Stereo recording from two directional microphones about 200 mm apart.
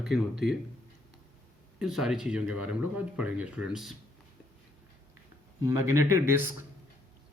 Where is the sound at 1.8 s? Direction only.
Centre (ahead or behind).